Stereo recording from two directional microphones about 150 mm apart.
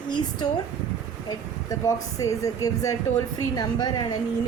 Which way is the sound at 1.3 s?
25° left (ahead or behind).